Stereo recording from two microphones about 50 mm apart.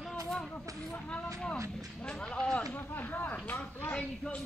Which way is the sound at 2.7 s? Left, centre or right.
Left.